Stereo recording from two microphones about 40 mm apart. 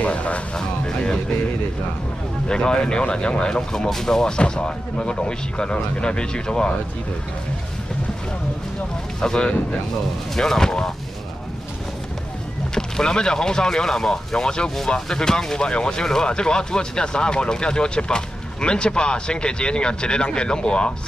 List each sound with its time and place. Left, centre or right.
0.0 s speech: left
0.6 s speech: centre
2.4 s speech: left
3.7 s speech: centre
9.2 s speech: centre
12.7 s speech: centre